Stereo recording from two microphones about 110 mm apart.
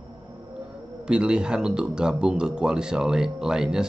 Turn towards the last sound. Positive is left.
turn(degrees=-5)  # may be behind; listen again after turning